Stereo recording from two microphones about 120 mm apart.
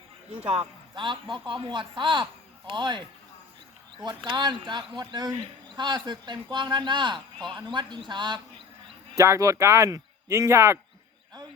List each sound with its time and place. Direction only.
0.3 s speech: 55° right (ahead or behind)
0.9 s speech: 40° right (ahead or behind)
4.0 s speech: 40° right (ahead or behind)
9.1 s speech: 25° right (ahead or behind)